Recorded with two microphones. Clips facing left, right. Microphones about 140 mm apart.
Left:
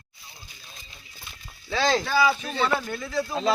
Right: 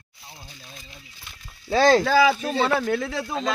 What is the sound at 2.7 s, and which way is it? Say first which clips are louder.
Speech: right 5 dB; 70° right (ahead or behind).